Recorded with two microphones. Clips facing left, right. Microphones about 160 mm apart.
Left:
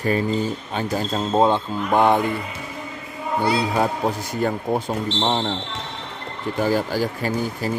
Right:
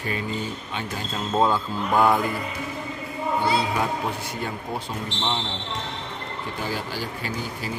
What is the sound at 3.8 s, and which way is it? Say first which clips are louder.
Speech: left 5 dB; 45° left (ahead or behind).